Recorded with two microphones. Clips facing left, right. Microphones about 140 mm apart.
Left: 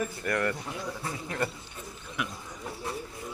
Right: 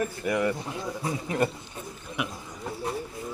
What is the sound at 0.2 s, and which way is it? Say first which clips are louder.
Speech: right 4 dB; 10° right (ahead or behind).